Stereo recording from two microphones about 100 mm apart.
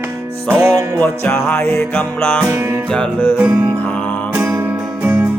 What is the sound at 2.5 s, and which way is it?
Music, 30° right (ahead or behind).